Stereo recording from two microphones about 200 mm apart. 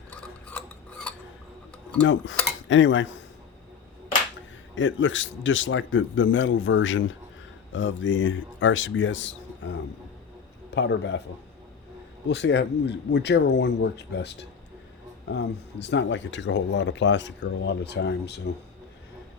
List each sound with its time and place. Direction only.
0.1 s a sound: 5° left (ahead or behind)
2.0 s a man's voice: 65° left (ahead or behind)
4.7 s a man's voice: 70° left (ahead or behind)
12.3 s speech: 60° left (ahead or behind)